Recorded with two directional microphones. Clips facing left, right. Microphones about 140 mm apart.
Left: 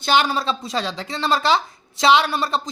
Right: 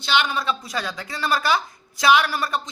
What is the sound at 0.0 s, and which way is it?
A woman's voice, 40° left (ahead or behind).